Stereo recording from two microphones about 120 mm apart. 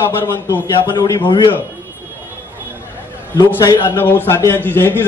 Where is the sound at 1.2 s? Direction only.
45° left (ahead or behind).